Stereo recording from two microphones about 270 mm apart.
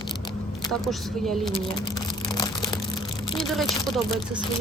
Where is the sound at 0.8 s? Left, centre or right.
Centre.